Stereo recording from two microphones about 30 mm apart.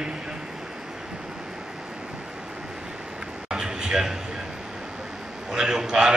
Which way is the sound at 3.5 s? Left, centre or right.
Centre.